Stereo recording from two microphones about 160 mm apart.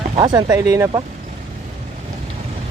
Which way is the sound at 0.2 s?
25° right (ahead or behind).